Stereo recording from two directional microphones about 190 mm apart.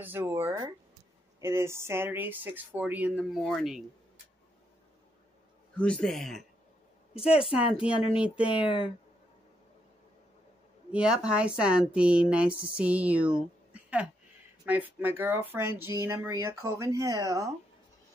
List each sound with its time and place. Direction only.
0.0 s speech: 10° right (ahead or behind)
5.8 s speech: 5° left (ahead or behind)
8.2 s speech: 5° right (ahead or behind)
8.6 s speech: 25° left (ahead or behind)
10.9 s a woman's voice: 5° right (ahead or behind)